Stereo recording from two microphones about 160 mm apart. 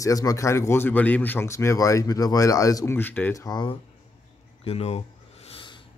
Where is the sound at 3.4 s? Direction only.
25° left (ahead or behind).